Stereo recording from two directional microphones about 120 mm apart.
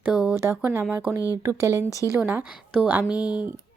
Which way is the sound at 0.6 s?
20° right (ahead or behind).